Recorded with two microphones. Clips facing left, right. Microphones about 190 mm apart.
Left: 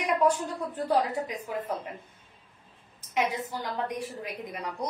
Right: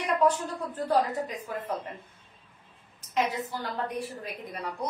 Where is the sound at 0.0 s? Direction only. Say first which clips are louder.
Even; 10° left (ahead or behind).